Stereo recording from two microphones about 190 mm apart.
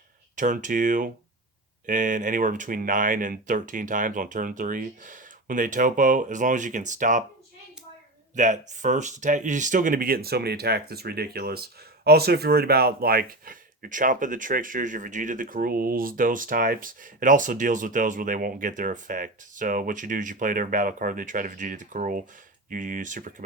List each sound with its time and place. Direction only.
0.3 s speech: 45° right (ahead or behind)
8.4 s speech: 40° right (ahead or behind)